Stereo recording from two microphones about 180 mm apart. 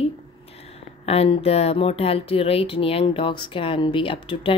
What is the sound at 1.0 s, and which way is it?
Speech, 35° left (ahead or behind).